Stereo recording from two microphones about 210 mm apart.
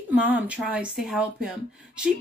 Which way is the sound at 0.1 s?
10° right (ahead or behind).